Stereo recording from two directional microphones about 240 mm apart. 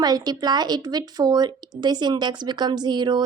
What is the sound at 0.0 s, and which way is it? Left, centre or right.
Speech, centre.